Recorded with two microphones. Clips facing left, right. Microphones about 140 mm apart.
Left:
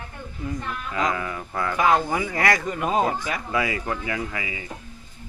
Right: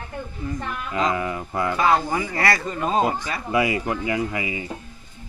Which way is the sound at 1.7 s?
15° left (ahead or behind).